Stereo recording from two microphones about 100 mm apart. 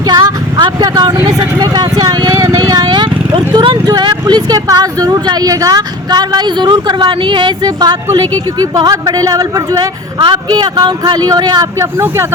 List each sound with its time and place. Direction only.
0.0 s speech: 40° right (ahead or behind)
12.0 s speech: 25° right (ahead or behind)